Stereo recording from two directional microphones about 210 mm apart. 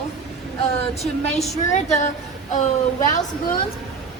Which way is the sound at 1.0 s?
30° left (ahead or behind).